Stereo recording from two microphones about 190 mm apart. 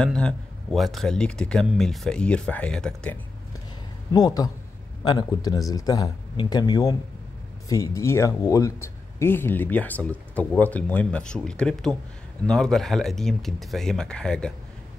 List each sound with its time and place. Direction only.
0.0 s speech: 5° left (ahead or behind)
4.1 s speech: 20° left (ahead or behind)